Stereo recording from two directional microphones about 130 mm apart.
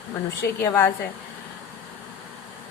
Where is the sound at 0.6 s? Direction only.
15° left (ahead or behind).